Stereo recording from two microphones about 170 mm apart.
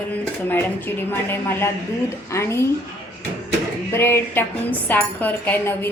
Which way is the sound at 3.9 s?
15° left (ahead or behind).